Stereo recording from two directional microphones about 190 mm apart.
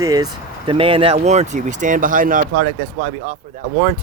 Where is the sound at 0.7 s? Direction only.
30° right (ahead or behind); by 2.7 s 50° right (ahead or behind).